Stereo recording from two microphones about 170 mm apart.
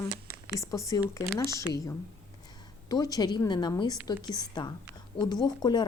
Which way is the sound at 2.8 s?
20° left (ahead or behind).